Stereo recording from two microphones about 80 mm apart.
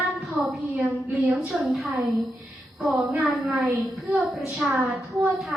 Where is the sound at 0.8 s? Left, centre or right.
Centre.